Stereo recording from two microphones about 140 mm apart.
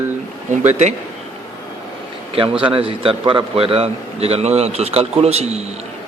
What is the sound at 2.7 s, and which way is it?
Speech, 40° right (ahead or behind).